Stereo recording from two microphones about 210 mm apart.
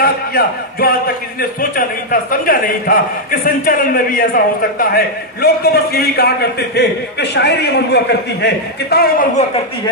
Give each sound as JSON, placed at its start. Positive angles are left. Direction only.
{"t": 0.0, "sound": "a man's voice", "side_deg": 45}